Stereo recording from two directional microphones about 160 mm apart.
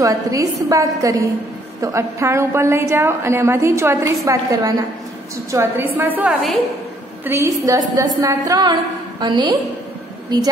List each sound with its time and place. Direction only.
0.0 s a woman's voice: 20° right (ahead or behind)